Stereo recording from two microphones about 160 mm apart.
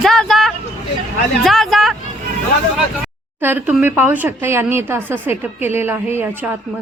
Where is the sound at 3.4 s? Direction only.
15° right (ahead or behind).